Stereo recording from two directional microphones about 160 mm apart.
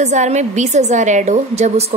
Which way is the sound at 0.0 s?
50° right (ahead or behind).